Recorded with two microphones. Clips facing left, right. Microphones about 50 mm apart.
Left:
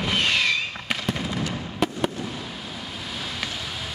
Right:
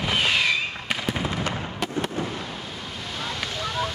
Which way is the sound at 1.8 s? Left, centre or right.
Centre.